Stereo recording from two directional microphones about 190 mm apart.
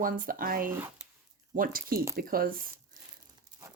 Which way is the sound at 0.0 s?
45° right (ahead or behind).